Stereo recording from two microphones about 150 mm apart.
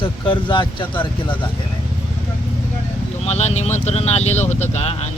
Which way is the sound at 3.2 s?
45° left (ahead or behind).